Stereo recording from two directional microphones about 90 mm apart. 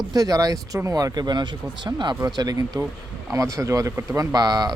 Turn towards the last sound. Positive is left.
turn(degrees=-45)  # may be behind; listen again after turning